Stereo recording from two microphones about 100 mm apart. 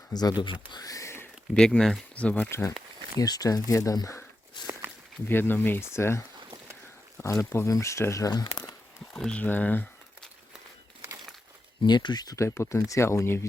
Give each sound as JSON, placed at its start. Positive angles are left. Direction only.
{"t": 0.1, "sound": "speech", "side_deg": 40}
{"t": 1.5, "sound": "speech", "side_deg": 5}
{"t": 2.5, "sound": "speech", "side_deg": 25}
{"t": 3.2, "sound": "speech", "side_deg": 40}
{"t": 4.6, "sound": "walk", "side_deg": 45}
{"t": 5.3, "sound": "speech", "side_deg": 20}
{"t": 9.1, "sound": "speech", "side_deg": 10}
{"t": 11.8, "sound": "speech", "side_deg": 50}